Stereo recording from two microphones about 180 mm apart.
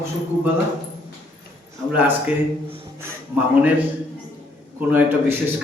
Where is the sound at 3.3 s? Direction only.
10° right (ahead or behind).